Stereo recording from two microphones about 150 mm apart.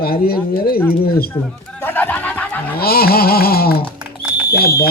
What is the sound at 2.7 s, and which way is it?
A man's voice, 90° left.